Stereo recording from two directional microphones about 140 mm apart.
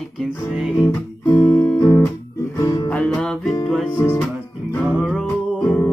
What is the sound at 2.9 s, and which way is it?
Music, 10° left (ahead or behind).